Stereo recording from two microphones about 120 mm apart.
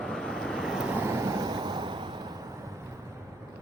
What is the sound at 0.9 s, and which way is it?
Vehicle, 20° right (ahead or behind).